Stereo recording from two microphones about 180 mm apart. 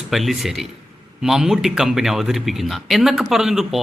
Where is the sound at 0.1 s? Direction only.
Centre (ahead or behind).